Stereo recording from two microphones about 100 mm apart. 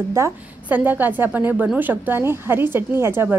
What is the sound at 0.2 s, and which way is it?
A woman's voice, 25° right (ahead or behind).